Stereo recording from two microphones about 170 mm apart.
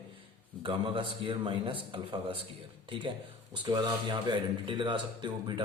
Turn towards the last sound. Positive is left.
turn(degrees=-25)  # may be behind; listen again after turning